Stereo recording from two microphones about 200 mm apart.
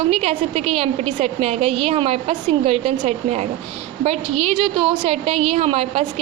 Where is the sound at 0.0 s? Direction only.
30° right (ahead or behind).